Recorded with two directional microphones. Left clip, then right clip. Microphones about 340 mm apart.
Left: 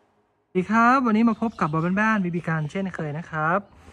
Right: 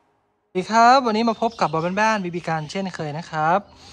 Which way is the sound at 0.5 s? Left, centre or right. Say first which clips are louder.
Right 5 dB; centre.